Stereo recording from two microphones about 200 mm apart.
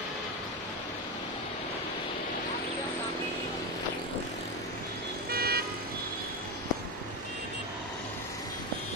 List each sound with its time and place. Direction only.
5.3 s vehicle: 50° right (ahead or behind)